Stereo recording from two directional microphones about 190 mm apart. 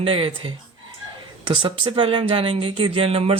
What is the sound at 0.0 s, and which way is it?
Speech, 30° right (ahead or behind).